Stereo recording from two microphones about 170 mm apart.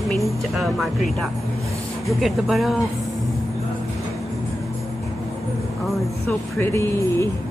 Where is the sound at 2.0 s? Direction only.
Centre (ahead or behind).